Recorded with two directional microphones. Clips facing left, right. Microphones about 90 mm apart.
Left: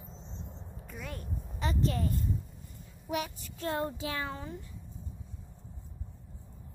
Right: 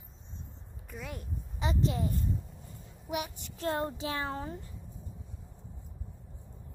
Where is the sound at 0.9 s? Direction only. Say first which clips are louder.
Right 1 dB; 5° right (ahead or behind).